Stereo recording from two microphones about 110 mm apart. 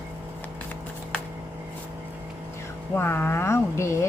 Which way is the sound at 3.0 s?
20° left (ahead or behind).